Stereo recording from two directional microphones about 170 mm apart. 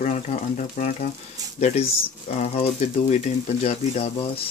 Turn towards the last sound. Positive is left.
turn(degrees=35)  # may be behind; listen again after turning